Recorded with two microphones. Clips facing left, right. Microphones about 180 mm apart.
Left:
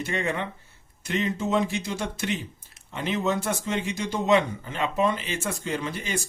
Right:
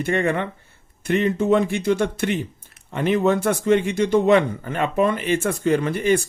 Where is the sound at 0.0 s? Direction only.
55° right (ahead or behind).